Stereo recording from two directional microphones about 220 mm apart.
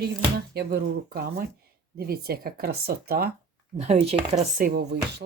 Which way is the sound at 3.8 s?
30° right (ahead or behind).